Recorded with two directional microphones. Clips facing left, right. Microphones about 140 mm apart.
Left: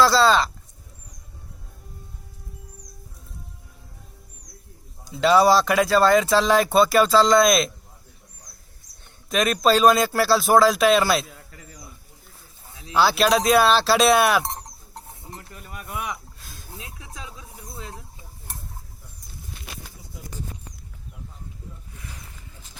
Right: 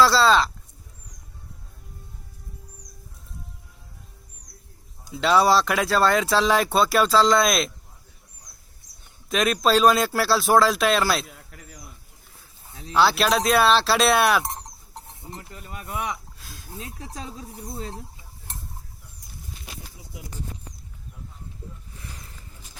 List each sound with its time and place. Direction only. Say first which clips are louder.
0.0 s speech: even; centre (ahead or behind)
5.1 s speech: left 2 dB; centre (ahead or behind)
9.3 s speech: left 1 dB; centre (ahead or behind)
12.9 s speech: left 1 dB; centre (ahead or behind)
15.4 s speech: right 1 dB; 25° right (ahead or behind)
16.4 s a sound: even; centre (ahead or behind)
16.7 s speech: right 5 dB; 35° right (ahead or behind)